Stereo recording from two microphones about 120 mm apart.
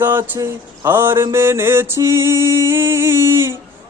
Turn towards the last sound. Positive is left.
turn(degrees=-20)  # may be behind; listen again after turning